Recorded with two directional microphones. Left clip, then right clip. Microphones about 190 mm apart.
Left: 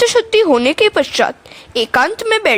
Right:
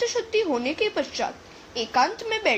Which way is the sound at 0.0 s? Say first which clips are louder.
Left 13 dB; 55° left (ahead or behind).